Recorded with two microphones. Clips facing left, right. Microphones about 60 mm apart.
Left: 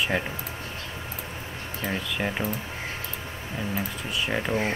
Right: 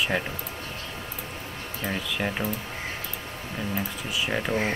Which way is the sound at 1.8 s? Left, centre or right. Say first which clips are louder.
Even; centre.